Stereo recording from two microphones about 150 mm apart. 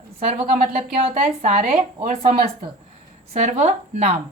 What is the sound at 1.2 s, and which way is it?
A woman's voice, 45° right (ahead or behind).